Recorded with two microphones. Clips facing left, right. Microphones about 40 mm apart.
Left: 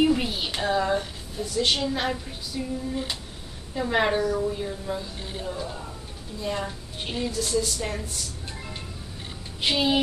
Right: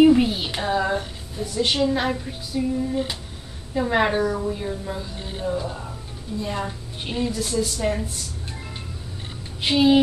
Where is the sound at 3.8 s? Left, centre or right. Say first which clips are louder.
Right 3 dB; centre.